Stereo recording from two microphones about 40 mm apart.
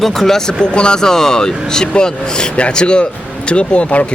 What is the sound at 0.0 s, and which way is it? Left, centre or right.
Speech, centre.